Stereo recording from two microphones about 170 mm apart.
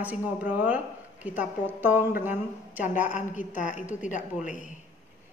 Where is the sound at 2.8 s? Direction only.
50° left (ahead or behind).